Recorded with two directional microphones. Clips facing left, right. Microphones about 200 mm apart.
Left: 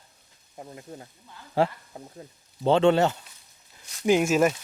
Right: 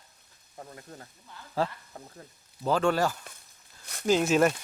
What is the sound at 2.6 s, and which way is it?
Speech, 25° left (ahead or behind).